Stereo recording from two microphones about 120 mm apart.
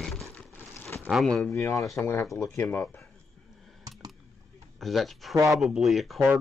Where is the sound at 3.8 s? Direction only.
30° right (ahead or behind).